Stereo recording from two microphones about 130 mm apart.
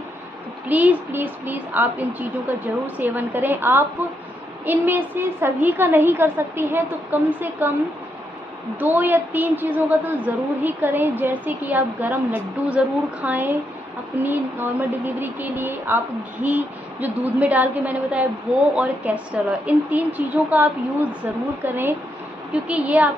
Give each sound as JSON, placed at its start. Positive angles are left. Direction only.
{"t": 0.7, "sound": "a woman's voice", "side_deg": -10}
{"t": 8.7, "sound": "a woman's voice", "side_deg": -15}